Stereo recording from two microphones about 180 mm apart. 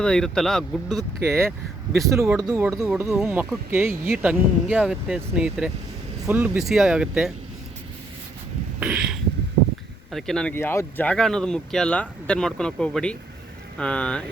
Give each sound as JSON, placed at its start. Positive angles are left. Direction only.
{"t": 0.0, "sound": "speech", "side_deg": 5}
{"t": 1.2, "sound": "speech", "side_deg": -15}
{"t": 8.8, "sound": "a sound", "side_deg": -5}
{"t": 10.1, "sound": "speech", "side_deg": 0}